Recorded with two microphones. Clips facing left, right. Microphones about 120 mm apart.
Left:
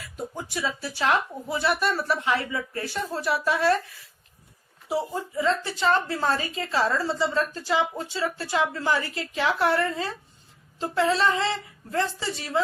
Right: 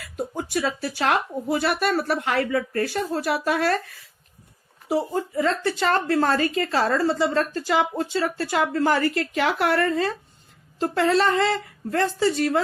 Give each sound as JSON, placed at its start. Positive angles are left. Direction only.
{"t": 0.0, "sound": "speech", "side_deg": -60}
{"t": 4.9, "sound": "speech", "side_deg": -60}